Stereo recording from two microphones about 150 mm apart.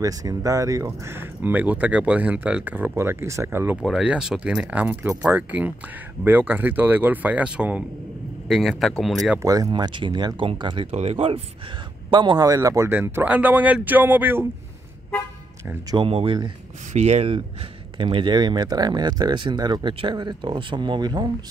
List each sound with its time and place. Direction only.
0.0 s speech: 25° right (ahead or behind); by 9.4 s centre (ahead or behind)
9.4 s speech: 25° right (ahead or behind)
15.9 s speech: 35° right (ahead or behind)
17.9 s speech: 30° right (ahead or behind)